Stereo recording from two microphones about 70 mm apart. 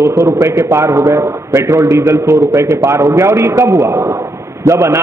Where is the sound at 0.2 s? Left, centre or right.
Right.